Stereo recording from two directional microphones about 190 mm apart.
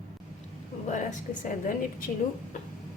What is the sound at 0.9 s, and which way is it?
A woman's voice, 40° left (ahead or behind).